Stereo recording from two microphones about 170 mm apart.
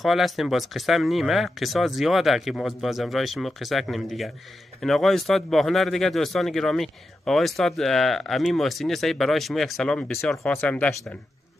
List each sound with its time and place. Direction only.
0.0 s speech: centre (ahead or behind)